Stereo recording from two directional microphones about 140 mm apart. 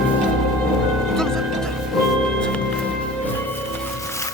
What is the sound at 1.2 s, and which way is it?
Music, 5° left (ahead or behind).